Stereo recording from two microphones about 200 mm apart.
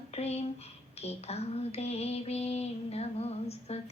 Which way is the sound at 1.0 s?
30° left (ahead or behind).